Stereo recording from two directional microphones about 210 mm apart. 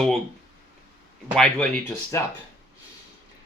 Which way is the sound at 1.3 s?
5° left (ahead or behind).